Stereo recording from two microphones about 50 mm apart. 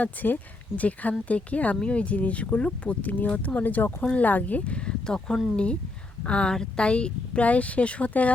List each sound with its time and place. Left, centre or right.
0.0 s speech: left